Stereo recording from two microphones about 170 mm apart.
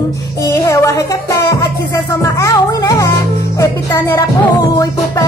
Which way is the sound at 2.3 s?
20° left (ahead or behind).